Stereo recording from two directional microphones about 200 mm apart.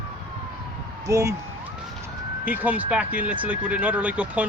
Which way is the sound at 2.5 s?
10° right (ahead or behind).